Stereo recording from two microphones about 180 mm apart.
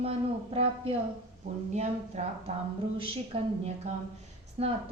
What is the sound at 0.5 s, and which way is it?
A woman's voice, 35° right (ahead or behind).